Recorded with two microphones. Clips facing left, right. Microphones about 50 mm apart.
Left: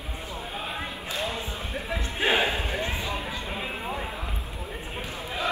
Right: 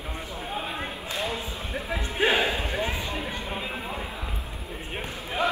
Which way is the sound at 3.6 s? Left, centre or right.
Centre.